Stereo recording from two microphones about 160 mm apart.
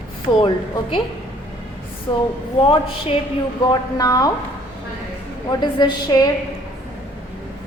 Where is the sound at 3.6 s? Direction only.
25° left (ahead or behind).